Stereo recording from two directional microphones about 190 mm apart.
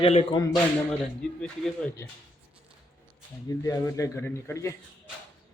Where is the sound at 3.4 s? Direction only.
15° left (ahead or behind).